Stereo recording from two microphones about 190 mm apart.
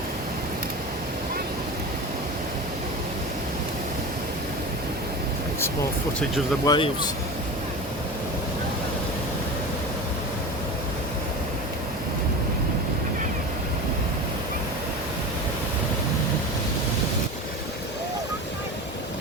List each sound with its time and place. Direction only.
6.7 s speech: 25° left (ahead or behind)